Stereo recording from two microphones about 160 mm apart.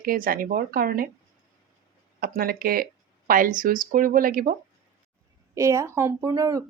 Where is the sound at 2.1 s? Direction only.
70° right (ahead or behind).